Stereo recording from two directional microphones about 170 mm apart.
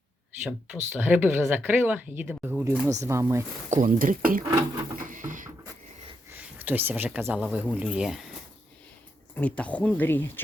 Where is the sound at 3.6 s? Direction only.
50° right (ahead or behind).